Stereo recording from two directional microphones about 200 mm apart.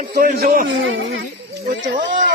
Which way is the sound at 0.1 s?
45° right (ahead or behind).